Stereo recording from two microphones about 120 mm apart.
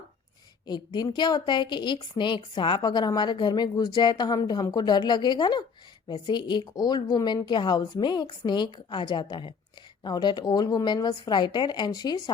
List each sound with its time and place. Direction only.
0.9 s speech: 40° left (ahead or behind)